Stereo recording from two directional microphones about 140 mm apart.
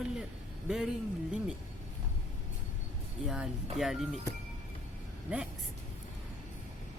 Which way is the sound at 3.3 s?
Centre (ahead or behind).